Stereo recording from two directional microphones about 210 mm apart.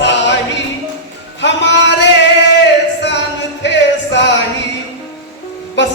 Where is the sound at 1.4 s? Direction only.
55° left (ahead or behind).